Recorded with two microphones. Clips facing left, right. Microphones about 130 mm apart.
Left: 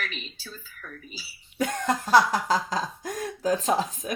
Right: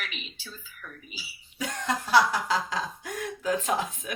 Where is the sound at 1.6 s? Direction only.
50° left (ahead or behind).